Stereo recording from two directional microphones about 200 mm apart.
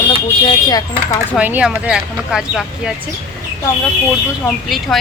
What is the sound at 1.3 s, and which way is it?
Speech, 5° right (ahead or behind).